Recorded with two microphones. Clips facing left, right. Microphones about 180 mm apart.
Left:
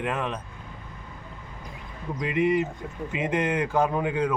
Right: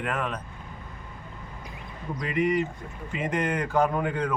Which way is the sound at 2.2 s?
20° left (ahead or behind).